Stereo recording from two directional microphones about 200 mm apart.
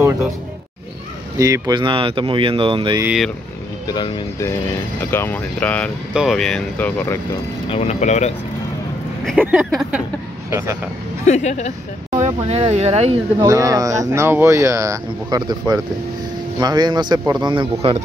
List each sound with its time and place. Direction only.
1.4 s speech: 20° right (ahead or behind)
3.0 s speech: 5° right (ahead or behind)
3.8 s speech: 20° left (ahead or behind); by 6.9 s 5° left (ahead or behind)
7.7 s speech: 30° left (ahead or behind)
9.2 s speech: centre (ahead or behind)
11.2 s speech: 35° left (ahead or behind)
12.4 s speech: 30° right (ahead or behind)
13.4 s speech: 15° right (ahead or behind)